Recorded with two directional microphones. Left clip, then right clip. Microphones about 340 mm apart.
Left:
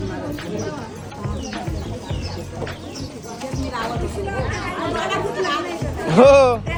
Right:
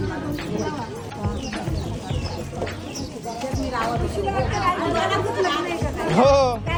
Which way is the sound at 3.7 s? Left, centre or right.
Centre.